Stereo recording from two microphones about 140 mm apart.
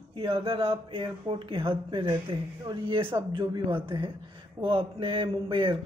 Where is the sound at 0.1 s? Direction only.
40° right (ahead or behind).